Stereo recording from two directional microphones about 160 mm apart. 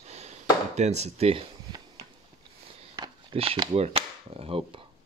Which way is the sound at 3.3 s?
30° right (ahead or behind).